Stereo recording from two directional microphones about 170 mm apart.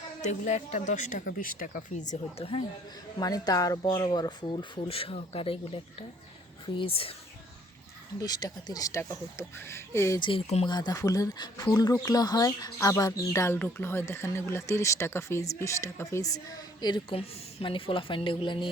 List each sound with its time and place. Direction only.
0.2 s speech: 45° left (ahead or behind)
3.2 s speech: 20° left (ahead or behind)
8.2 s speech: 25° left (ahead or behind)
10.2 s speech: 30° left (ahead or behind)